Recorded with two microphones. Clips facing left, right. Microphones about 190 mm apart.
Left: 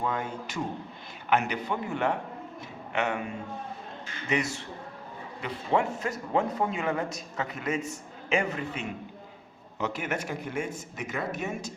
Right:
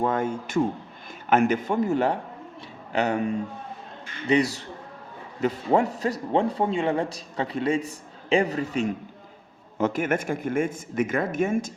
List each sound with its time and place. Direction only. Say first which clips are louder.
0.0 s a man's voice: right 7 dB; 45° right (ahead or behind)
4.3 s a man's voice: right 8 dB; 35° right (ahead or behind); by 11.7 s 50° right (ahead or behind)